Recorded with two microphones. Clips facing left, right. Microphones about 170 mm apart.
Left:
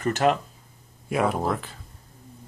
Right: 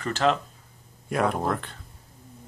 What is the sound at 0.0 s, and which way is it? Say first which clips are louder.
Speech: left 2 dB; 15° left (ahead or behind).